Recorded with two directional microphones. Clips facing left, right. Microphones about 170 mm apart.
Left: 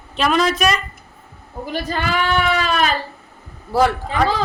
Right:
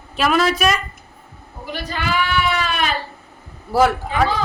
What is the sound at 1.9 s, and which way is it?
Child singing, 40° left (ahead or behind).